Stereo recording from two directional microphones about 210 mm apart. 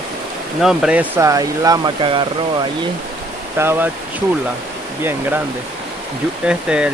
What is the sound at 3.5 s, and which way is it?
Speech, 10° right (ahead or behind).